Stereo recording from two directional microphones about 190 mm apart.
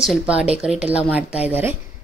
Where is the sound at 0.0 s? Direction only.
5° right (ahead or behind).